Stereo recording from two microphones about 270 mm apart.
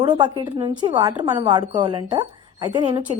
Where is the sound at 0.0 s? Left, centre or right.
Centre.